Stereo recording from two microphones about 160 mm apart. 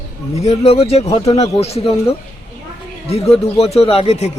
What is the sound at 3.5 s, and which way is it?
Speech, 40° left (ahead or behind).